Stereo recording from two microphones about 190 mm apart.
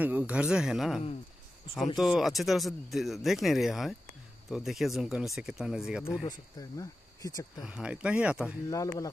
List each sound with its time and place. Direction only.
0.0 s speech: 10° right (ahead or behind)
6.8 s speech: 20° left (ahead or behind)
7.6 s speech: 5° right (ahead or behind)
8.6 s speech: 20° left (ahead or behind)